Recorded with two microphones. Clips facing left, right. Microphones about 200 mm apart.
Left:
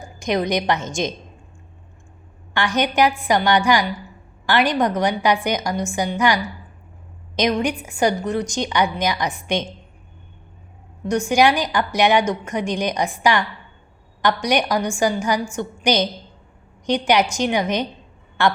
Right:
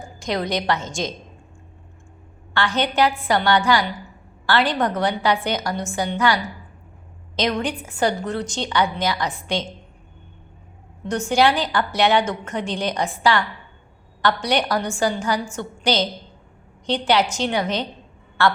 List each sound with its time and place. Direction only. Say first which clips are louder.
0.2 s a woman's voice: left 3 dB; 20° left (ahead or behind)
2.5 s a woman's voice: left 1 dB; 15° left (ahead or behind)
11.1 s a woman's voice: left 2 dB; 15° left (ahead or behind)